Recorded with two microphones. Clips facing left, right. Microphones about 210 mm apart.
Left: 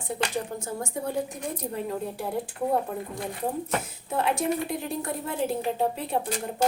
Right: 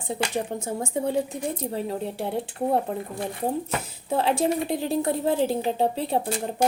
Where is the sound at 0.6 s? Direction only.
25° right (ahead or behind).